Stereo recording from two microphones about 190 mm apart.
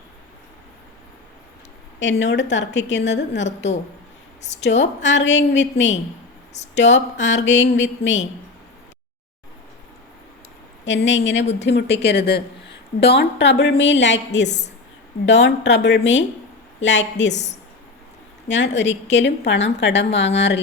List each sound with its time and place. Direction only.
2.0 s a woman's voice: 75° left (ahead or behind)
10.8 s a woman's voice: 70° left (ahead or behind)
14.4 s a woman's voice: 35° left (ahead or behind)
15.3 s a woman's voice: 70° left (ahead or behind)
17.3 s a woman's voice: 35° left (ahead or behind)
18.4 s a woman's voice: 70° left (ahead or behind)